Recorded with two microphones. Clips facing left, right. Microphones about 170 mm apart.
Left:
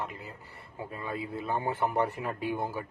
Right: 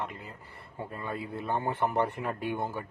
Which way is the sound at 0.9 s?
Centre (ahead or behind).